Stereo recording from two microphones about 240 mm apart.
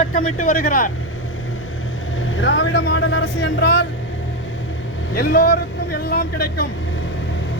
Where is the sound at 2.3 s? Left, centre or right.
Left.